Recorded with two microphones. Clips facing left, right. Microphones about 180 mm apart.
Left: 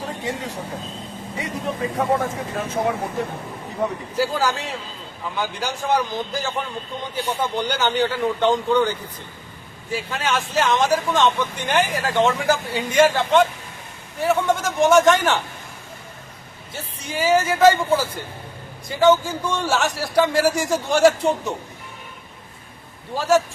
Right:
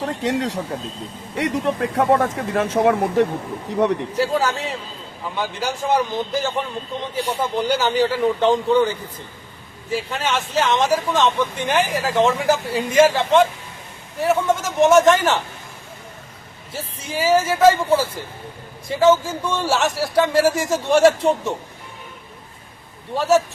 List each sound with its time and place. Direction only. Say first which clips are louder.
0.0 s speech: right 6 dB; 85° right
4.2 s speech: even; centre (ahead or behind)
16.7 s speech: right 2 dB; centre (ahead or behind)
18.9 s speech: right 1 dB; centre (ahead or behind)
23.1 s speech: right 1 dB; centre (ahead or behind)